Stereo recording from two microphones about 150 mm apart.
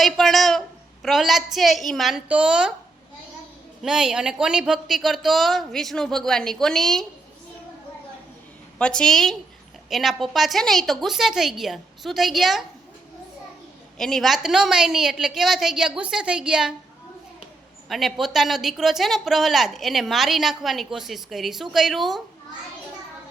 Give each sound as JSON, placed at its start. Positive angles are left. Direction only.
{"t": 0.0, "sound": "a woman's voice", "side_deg": 0}
{"t": 3.8, "sound": "a woman's voice", "side_deg": -5}
{"t": 8.8, "sound": "a woman's voice", "side_deg": 5}
{"t": 14.0, "sound": "a woman's voice", "side_deg": 0}
{"t": 17.8, "sound": "a woman's voice", "side_deg": 0}